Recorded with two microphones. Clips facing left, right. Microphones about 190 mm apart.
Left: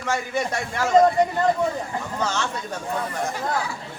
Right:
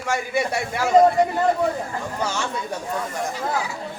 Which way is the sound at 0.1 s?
10° right (ahead or behind).